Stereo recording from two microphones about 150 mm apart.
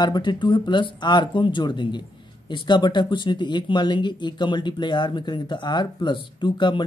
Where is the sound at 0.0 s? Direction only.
30° left (ahead or behind).